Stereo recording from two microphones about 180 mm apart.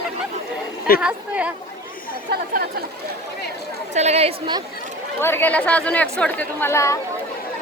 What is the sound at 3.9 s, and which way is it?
Speech, 35° right (ahead or behind).